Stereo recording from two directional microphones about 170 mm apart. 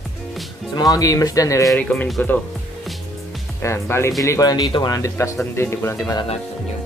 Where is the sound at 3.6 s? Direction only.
15° left (ahead or behind).